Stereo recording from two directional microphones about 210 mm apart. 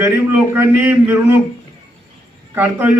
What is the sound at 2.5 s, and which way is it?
Speech, 10° right (ahead or behind).